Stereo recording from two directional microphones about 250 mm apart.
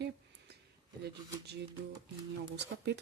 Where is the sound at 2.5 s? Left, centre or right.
Right.